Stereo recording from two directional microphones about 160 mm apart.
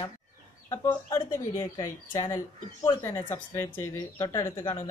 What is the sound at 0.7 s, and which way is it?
Speech, 20° left (ahead or behind).